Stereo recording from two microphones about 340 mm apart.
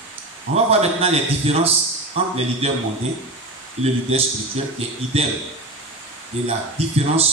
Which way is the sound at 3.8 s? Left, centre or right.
Centre.